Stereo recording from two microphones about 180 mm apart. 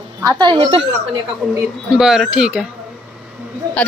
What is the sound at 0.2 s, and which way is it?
Speech, 25° right (ahead or behind).